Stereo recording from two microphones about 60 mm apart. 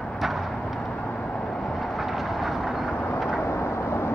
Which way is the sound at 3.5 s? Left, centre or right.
Left.